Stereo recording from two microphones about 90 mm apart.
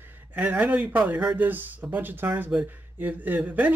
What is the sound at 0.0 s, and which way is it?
Speech, 20° right (ahead or behind).